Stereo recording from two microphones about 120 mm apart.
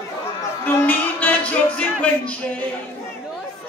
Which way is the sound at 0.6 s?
15° left (ahead or behind).